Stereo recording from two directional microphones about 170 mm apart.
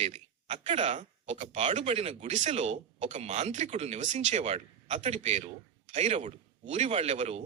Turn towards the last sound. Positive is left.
turn(degrees=-40)  # may be behind; listen again after turning